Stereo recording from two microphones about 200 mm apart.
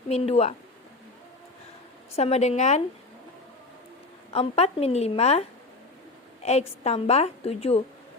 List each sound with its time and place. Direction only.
0.1 s a woman's voice: 30° left (ahead or behind)
2.1 s a woman's voice: 30° left (ahead or behind)
4.3 s a woman's voice: 30° left (ahead or behind)